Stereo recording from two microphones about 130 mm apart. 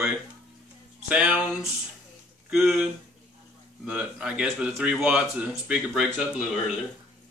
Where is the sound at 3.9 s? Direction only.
10° right (ahead or behind).